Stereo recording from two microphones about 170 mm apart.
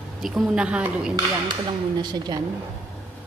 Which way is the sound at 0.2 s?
5° right (ahead or behind).